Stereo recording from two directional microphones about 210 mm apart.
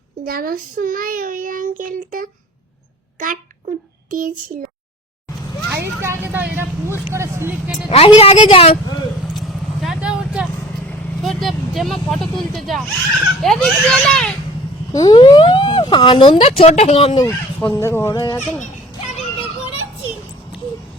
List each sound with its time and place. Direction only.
0.3 s a child's voice: 45° right (ahead or behind)
4.1 s a child's voice: 40° right (ahead or behind)
5.7 s vehicle: 10° right (ahead or behind)
7.1 s speech: 15° right (ahead or behind)
7.9 s speech: 30° left (ahead or behind)
9.3 s vehicle: centre (ahead or behind)
10.8 s speech: centre (ahead or behind)
14.9 s speech: 20° left (ahead or behind)
17.6 s speech: 10° left (ahead or behind)
19.1 s music: 25° left (ahead or behind)